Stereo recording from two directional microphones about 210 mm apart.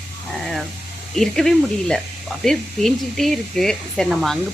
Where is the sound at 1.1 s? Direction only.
Centre (ahead or behind).